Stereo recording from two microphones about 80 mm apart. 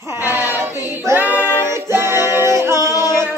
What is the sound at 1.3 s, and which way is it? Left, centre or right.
Music, right.